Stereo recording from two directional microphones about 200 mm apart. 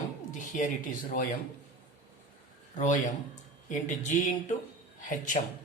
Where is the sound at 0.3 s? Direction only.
40° left (ahead or behind).